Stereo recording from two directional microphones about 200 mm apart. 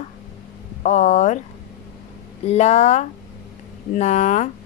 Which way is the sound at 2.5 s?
35° left (ahead or behind).